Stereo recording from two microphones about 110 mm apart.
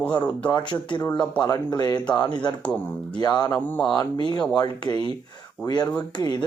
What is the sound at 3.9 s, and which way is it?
Speech, 40° left (ahead or behind).